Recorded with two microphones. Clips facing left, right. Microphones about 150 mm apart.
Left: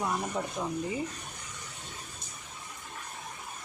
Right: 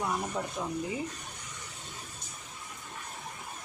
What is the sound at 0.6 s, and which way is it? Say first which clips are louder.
Speech: left 2 dB; centre (ahead or behind).